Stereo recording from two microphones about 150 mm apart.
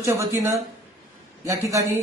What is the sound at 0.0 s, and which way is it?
Speech, 20° right (ahead or behind).